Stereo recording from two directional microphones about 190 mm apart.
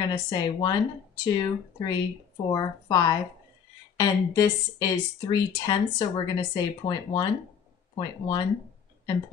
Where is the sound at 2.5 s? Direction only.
20° left (ahead or behind).